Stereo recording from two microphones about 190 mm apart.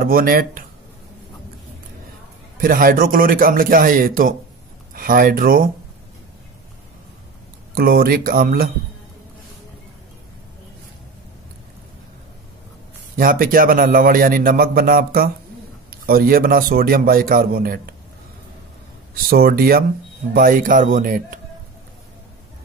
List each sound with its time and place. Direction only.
0.0 s a man's voice: 50° right (ahead or behind)
2.5 s a man's voice: 50° right (ahead or behind)
7.7 s a man's voice: 50° right (ahead or behind)
13.1 s a man's voice: 45° right (ahead or behind)
19.2 s a man's voice: 50° right (ahead or behind)